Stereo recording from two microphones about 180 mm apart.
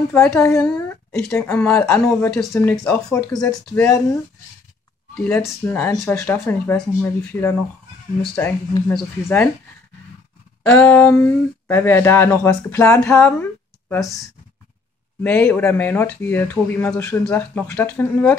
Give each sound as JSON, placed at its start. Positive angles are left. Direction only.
{"t": 0.1, "sound": "a woman's voice", "side_deg": 5}
{"t": 0.4, "sound": "speech", "side_deg": 15}
{"t": 8.7, "sound": "speech", "side_deg": 25}
{"t": 10.6, "sound": "speech", "side_deg": 10}
{"t": 15.2, "sound": "speech", "side_deg": 10}